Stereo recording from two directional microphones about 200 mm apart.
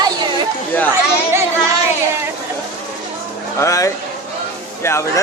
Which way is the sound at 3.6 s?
15° left (ahead or behind).